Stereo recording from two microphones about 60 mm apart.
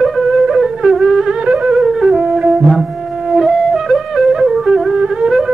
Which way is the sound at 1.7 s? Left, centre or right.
Centre.